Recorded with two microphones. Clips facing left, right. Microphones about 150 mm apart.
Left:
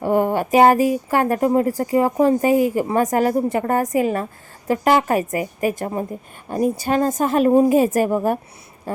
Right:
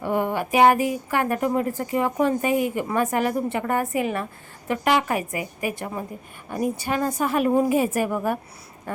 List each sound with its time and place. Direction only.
0.0 s a sound: 45° left (ahead or behind)
1.1 s a woman's voice: 35° left (ahead or behind)
7.4 s a woman's voice: 30° left (ahead or behind)